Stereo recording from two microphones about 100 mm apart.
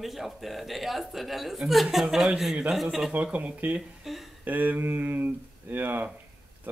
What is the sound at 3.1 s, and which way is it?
Speech, 15° right (ahead or behind).